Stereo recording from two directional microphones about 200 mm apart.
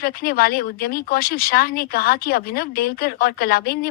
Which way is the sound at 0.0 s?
50° left (ahead or behind).